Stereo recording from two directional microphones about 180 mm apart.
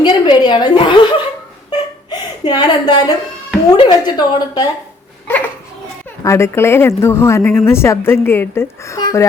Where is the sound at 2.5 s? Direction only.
25° left (ahead or behind).